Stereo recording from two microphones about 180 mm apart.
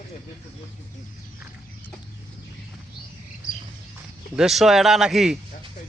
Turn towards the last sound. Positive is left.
turn(degrees=0)  # may be behind; listen again after turning